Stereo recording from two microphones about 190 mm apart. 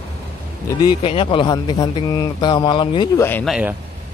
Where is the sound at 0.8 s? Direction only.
25° left (ahead or behind).